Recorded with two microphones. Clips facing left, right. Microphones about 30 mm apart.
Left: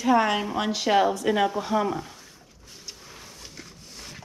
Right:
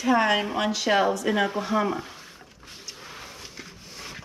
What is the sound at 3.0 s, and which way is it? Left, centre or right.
Wild animals, right.